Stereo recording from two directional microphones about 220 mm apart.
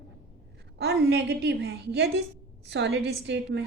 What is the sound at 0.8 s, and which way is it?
A woman's voice, 50° right (ahead or behind).